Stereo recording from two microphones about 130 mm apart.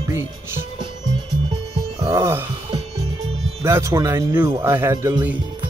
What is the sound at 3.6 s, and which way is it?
Speech, 20° right (ahead or behind).